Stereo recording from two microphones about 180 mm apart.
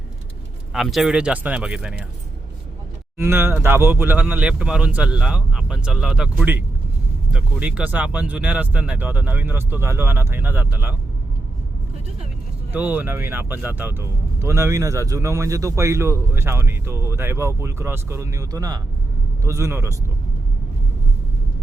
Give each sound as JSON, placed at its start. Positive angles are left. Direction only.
{"t": 0.7, "sound": "speech", "side_deg": 0}
{"t": 3.2, "sound": "speech", "side_deg": -15}
{"t": 12.7, "sound": "speech", "side_deg": -10}